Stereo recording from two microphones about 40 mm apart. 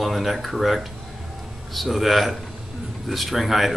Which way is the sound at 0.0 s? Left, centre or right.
Centre.